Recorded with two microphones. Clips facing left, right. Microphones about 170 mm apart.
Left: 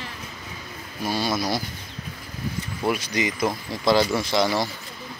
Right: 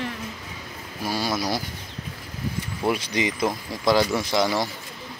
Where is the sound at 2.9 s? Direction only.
25° right (ahead or behind).